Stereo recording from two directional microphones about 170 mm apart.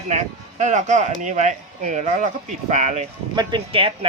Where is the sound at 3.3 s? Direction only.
25° right (ahead or behind).